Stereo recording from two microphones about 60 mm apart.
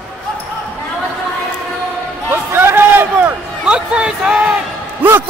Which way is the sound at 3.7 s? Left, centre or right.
Centre.